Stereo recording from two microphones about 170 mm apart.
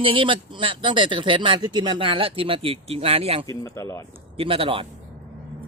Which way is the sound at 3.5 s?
20° left (ahead or behind).